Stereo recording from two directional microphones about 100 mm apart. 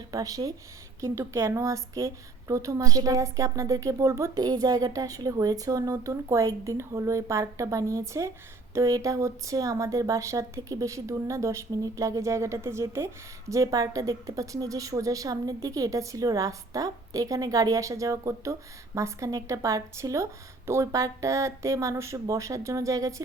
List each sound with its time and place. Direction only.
0.1 s a woman's voice: 35° right (ahead or behind)